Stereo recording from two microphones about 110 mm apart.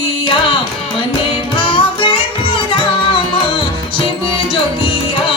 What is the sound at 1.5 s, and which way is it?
Music, 50° left (ahead or behind).